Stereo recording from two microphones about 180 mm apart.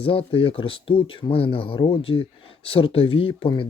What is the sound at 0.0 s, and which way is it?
Speech, 30° left (ahead or behind).